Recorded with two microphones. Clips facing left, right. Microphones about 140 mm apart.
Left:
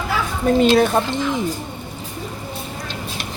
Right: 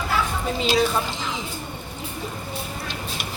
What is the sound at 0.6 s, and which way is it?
Speech, 55° left (ahead or behind).